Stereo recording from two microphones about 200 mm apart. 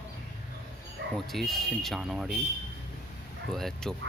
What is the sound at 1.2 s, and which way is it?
Speech, centre (ahead or behind).